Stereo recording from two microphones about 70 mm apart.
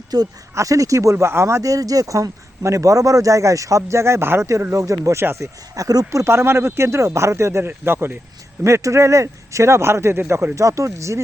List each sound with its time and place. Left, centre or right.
0.1 s speech: right
0.5 s a man's voice: right
1.1 s a man's voice: right
5.7 s speech: right
6.3 s speech: right
7.7 s speech: right
8.6 s a man's voice: right